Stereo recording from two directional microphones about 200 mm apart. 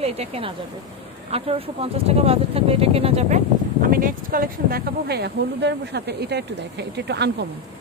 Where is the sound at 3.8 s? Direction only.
45° right (ahead or behind).